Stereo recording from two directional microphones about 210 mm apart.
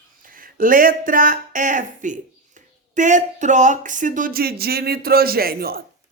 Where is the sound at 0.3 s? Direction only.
40° right (ahead or behind).